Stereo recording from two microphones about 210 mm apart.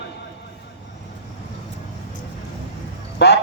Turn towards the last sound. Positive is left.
turn(degrees=50)  # may be behind; listen again after turning